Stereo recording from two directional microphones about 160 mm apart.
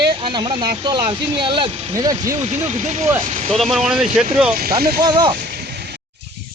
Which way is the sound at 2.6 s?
45° right (ahead or behind).